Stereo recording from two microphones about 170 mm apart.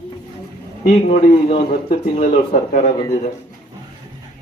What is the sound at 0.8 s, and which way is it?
Speech, 40° left (ahead or behind).